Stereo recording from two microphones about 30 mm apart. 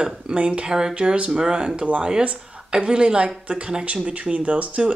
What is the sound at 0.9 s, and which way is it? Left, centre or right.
Speech, right.